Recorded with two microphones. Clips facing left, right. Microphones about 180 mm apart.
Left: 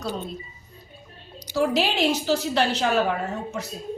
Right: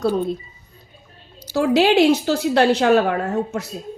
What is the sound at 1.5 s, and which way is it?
A woman's voice, 70° right (ahead or behind).